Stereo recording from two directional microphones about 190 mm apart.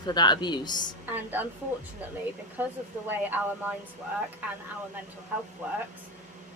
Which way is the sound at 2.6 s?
10° right (ahead or behind).